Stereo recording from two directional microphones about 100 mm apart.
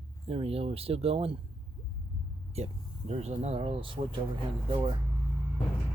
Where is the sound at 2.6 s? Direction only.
90° right; by 4.2 s 60° right (ahead or behind).